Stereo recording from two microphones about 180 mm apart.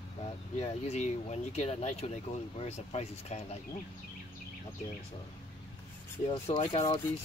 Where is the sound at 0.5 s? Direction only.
40° left (ahead or behind).